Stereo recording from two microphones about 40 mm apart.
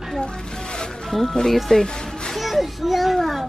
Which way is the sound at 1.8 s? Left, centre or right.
Centre.